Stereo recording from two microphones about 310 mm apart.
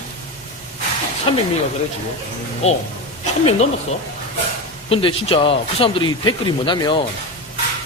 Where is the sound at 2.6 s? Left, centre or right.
Left.